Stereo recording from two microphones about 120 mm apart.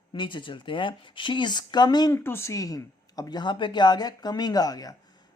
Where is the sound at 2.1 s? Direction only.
20° left (ahead or behind).